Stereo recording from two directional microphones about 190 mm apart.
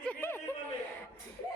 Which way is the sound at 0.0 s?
10° left (ahead or behind).